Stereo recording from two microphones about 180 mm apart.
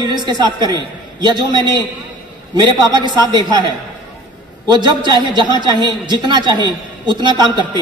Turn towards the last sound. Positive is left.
turn(degrees=-25)  # may be behind; listen again after turning